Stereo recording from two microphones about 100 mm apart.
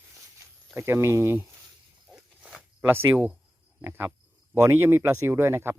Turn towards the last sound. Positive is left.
turn(degrees=-25)  # may be behind; listen again after turning